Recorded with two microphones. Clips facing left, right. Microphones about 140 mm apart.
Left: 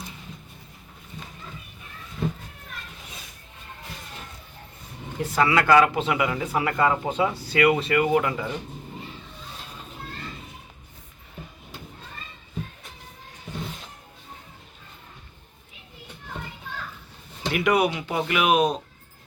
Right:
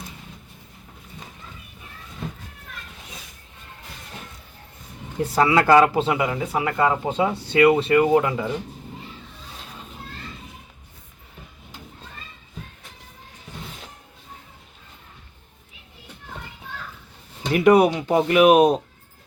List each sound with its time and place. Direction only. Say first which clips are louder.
5.2 s speech: right 3 dB; 30° right (ahead or behind)
17.5 s speech: right 7 dB; 35° right (ahead or behind)